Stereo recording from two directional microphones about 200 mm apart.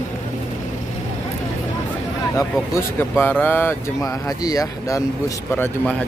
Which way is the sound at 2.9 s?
10° left (ahead or behind).